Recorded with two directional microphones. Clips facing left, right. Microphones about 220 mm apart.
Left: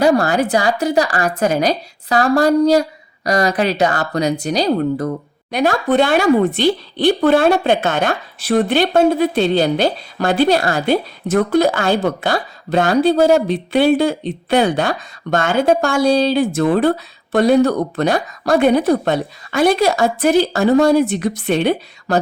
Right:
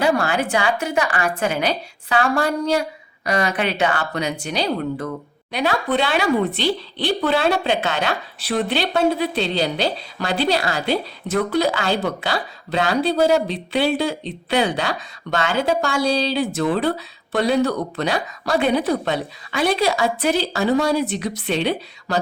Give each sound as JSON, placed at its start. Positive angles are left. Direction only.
{"t": 0.0, "sound": "a woman's voice", "side_deg": 40}